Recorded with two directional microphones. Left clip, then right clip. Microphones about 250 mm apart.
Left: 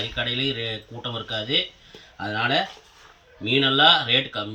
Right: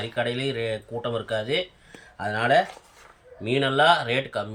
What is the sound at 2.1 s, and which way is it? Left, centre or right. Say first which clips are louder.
Speech: right 2 dB; centre.